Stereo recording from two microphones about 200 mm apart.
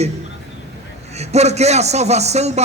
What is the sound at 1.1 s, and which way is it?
Speech, 35° right (ahead or behind).